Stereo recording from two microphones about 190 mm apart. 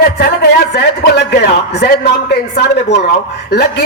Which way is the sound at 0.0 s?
60° left (ahead or behind).